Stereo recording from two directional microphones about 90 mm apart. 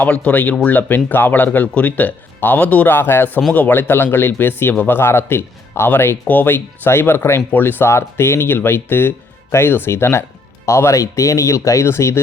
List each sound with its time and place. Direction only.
0.0 s a man's voice: 15° left (ahead or behind)